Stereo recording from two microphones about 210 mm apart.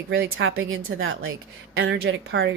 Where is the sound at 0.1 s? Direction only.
65° right (ahead or behind).